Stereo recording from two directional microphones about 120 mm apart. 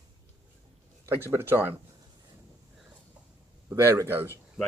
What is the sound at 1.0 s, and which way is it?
Speech, 20° right (ahead or behind).